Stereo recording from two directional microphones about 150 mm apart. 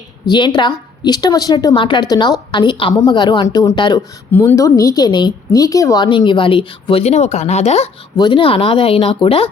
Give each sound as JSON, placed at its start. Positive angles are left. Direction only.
{"t": 0.3, "sound": "a woman's voice", "side_deg": 30}
{"t": 4.3, "sound": "a woman's voice", "side_deg": 15}
{"t": 8.1, "sound": "a woman's voice", "side_deg": 30}